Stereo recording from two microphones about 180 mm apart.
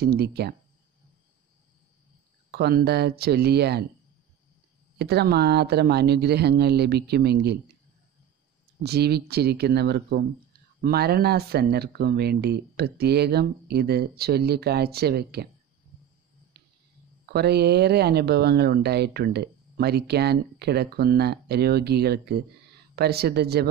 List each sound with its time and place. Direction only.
0.0 s speech: 60° right (ahead or behind)
2.5 s speech: 65° right (ahead or behind)
4.9 s speech: 65° right (ahead or behind)
8.8 s speech: 65° right (ahead or behind)
17.3 s speech: 65° right (ahead or behind)